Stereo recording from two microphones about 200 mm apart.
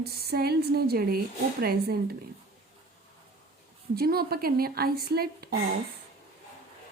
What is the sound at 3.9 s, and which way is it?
A woman's voice, 50° right (ahead or behind).